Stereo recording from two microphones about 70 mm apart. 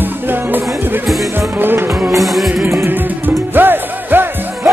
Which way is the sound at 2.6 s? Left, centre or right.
Right.